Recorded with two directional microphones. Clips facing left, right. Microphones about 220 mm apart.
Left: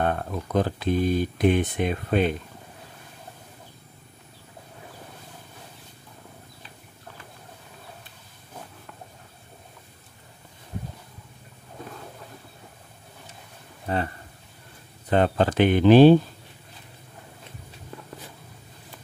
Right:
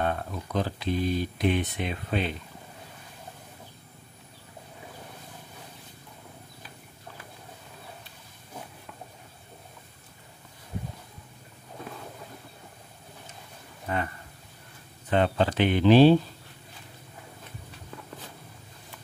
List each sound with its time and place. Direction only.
0.0 s speech: 50° left (ahead or behind)
13.8 s a sound: 30° left (ahead or behind)
15.0 s speech: 45° left (ahead or behind)